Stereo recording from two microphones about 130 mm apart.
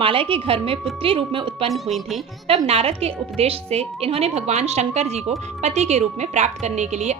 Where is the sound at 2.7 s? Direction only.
50° right (ahead or behind).